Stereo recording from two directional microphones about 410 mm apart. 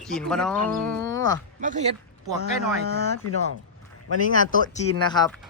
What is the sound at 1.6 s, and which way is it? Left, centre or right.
Speech, centre.